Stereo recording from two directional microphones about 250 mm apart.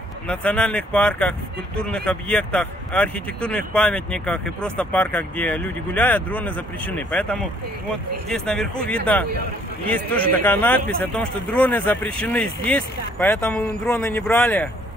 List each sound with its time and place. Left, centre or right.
0.3 s a man's voice: centre